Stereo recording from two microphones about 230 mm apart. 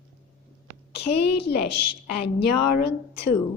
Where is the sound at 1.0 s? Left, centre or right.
Left.